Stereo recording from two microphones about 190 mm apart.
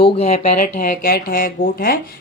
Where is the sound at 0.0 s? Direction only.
35° left (ahead or behind).